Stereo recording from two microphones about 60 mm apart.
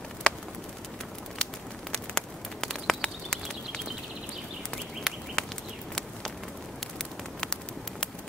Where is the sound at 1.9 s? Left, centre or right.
Centre.